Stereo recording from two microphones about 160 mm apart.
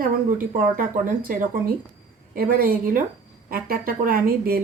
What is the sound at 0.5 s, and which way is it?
Speech, 60° right (ahead or behind).